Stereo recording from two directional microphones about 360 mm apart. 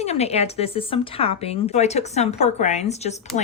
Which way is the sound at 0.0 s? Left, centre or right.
Centre.